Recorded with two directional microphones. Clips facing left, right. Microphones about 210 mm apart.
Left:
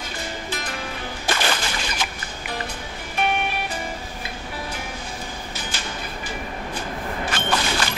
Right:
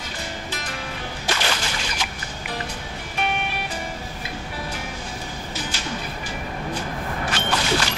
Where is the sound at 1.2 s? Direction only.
50° left (ahead or behind).